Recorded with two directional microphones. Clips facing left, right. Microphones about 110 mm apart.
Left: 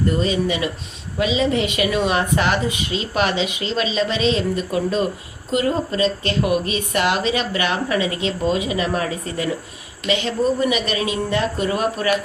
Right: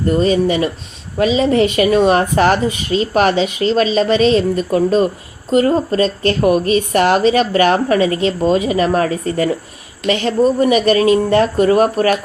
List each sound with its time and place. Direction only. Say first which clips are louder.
0.2 s speech: right 7 dB; 45° right (ahead or behind)